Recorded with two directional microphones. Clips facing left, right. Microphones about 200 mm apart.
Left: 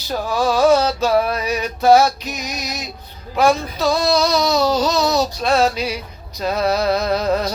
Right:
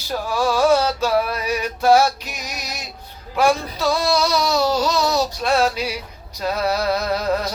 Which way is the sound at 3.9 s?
10° right (ahead or behind).